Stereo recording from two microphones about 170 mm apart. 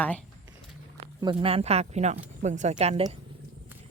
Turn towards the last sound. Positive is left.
turn(degrees=-35)  # may be behind; listen again after turning